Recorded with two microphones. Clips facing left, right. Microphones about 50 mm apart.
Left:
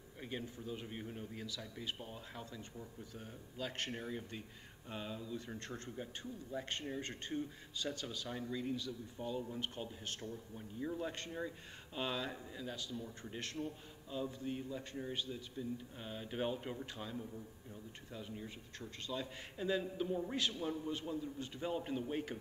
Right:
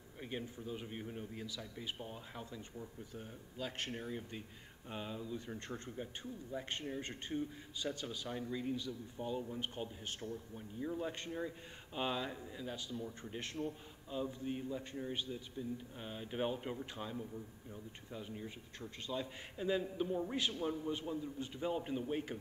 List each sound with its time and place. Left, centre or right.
0.2 s a man's voice: centre
15.3 s a man's voice: centre